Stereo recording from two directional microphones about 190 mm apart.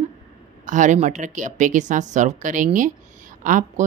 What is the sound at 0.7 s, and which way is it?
A woman's voice, 40° right (ahead or behind).